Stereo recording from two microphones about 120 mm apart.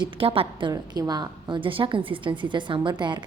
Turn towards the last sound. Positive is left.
turn(degrees=-40)  # may be behind; listen again after turning